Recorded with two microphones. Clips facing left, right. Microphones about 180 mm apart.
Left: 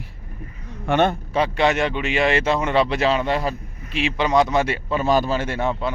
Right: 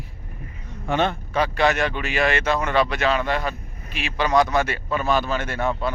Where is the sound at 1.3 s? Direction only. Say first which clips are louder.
Left 1 dB; 25° left (ahead or behind).